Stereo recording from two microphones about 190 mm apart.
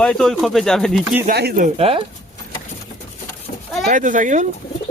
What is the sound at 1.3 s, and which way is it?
Speech, 55° right (ahead or behind).